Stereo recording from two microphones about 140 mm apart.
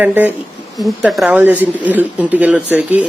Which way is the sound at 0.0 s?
10° right (ahead or behind).